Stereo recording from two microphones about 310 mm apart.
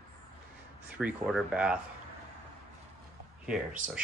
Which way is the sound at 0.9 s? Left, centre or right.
Centre.